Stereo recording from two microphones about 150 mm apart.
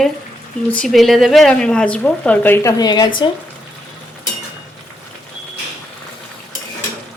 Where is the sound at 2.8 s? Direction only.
25° left (ahead or behind).